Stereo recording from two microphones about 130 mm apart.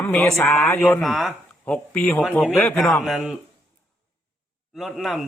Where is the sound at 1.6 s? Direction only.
10° left (ahead or behind).